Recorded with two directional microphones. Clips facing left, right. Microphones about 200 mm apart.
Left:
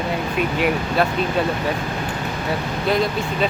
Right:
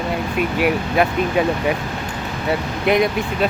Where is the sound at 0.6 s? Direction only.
10° right (ahead or behind).